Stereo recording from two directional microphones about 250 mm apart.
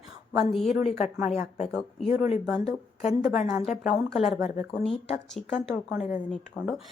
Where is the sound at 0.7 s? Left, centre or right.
Left.